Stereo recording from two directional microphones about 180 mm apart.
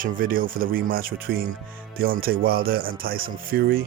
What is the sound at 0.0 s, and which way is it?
Speech, 50° right (ahead or behind).